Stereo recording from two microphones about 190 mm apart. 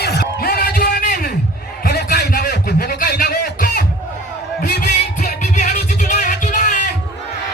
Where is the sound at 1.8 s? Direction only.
55° left (ahead or behind).